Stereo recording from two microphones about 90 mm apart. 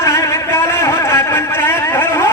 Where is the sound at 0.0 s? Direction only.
30° left (ahead or behind).